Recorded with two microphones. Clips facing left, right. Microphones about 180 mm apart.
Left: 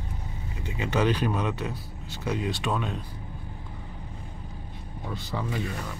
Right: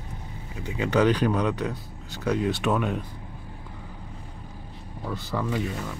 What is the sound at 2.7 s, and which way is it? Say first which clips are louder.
Speech: right 5 dB; 5° right (ahead or behind).